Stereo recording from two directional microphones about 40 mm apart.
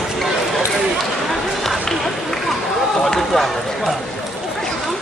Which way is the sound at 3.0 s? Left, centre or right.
Centre.